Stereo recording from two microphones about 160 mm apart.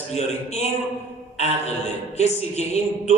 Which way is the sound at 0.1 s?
45° left (ahead or behind).